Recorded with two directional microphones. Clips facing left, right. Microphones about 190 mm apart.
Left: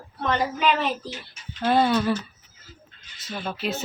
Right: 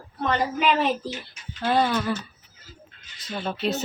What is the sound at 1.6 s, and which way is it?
Speech, 25° left (ahead or behind).